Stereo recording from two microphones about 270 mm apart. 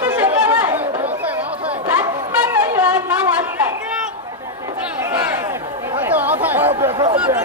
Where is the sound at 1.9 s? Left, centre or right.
Centre.